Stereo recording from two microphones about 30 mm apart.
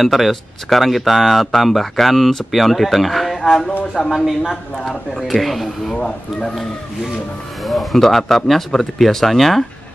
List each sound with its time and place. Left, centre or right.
0.0 s speech: centre
4.0 s a woman's voice: centre
5.3 s speech: centre
5.9 s speech: left
7.6 s speech: centre